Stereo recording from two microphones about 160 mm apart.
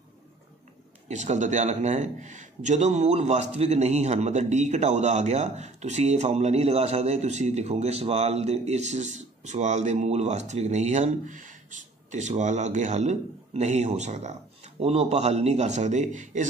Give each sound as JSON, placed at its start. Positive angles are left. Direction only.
{"t": 1.0, "sound": "a man's voice", "side_deg": -45}